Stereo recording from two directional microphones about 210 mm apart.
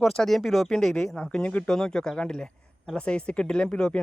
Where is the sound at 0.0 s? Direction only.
Centre (ahead or behind).